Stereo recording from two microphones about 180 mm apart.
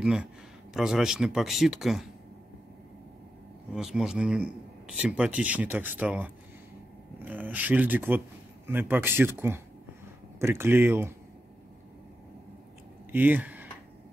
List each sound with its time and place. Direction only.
0.0 s speech: 5° right (ahead or behind)
3.7 s speech: 5° right (ahead or behind)
13.1 s speech: 10° right (ahead or behind)